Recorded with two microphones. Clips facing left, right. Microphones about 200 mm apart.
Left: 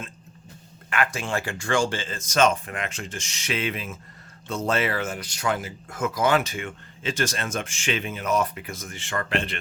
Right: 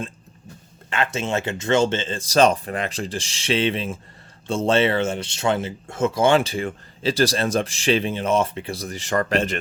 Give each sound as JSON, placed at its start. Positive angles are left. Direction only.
{"t": 0.9, "sound": "speech", "side_deg": -25}